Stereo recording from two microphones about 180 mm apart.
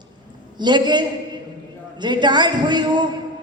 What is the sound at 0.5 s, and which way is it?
A woman's voice, 25° right (ahead or behind).